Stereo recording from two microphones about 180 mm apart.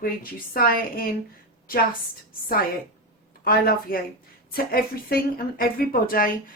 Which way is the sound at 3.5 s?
55° left (ahead or behind).